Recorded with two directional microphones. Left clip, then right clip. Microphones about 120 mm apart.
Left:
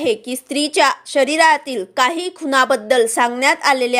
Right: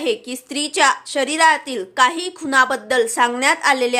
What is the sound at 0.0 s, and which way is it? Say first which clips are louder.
A woman's voice: left 3 dB; 30° left (ahead or behind).